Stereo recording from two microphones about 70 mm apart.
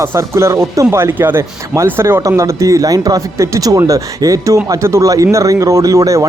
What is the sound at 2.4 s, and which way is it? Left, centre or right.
Speech, right.